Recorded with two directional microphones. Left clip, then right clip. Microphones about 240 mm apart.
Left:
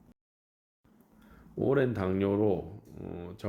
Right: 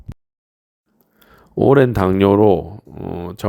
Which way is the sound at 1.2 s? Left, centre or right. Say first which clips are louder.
Right 16 dB; right.